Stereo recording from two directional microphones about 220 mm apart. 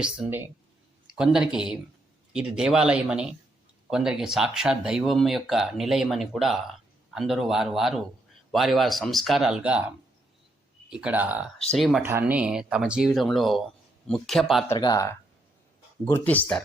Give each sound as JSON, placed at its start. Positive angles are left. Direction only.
{"t": 0.0, "sound": "speech", "side_deg": -5}
{"t": 14.7, "sound": "speech", "side_deg": 15}